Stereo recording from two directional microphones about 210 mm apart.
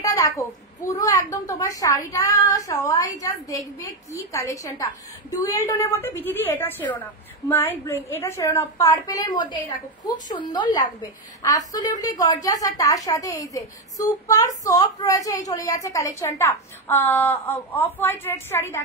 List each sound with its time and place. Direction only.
0.0 s a woman's voice: 15° left (ahead or behind)